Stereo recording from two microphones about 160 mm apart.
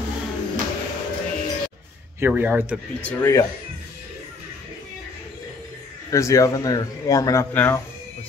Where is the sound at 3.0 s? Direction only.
10° left (ahead or behind).